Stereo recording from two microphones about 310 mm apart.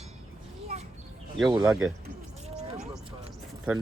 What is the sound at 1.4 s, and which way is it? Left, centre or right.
Speech, centre.